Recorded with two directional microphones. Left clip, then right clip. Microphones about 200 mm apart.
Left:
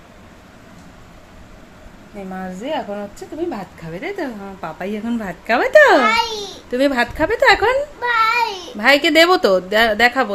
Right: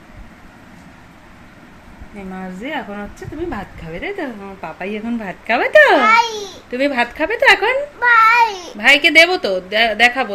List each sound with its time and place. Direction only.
2.1 s a woman's voice: 5° left (ahead or behind)
6.0 s a child's voice: 10° right (ahead or behind)
6.7 s a woman's voice: 15° left (ahead or behind)
7.9 s a sound: 15° right (ahead or behind)
8.8 s speech: 15° left (ahead or behind)